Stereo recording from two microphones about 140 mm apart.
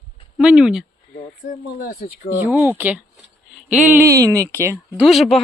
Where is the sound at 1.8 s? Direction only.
90° left.